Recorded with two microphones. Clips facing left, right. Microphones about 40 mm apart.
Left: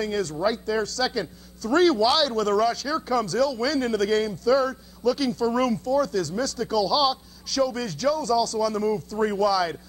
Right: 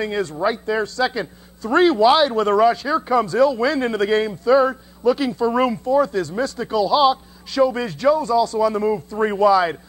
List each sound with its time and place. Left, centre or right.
0.0 s a man's voice: right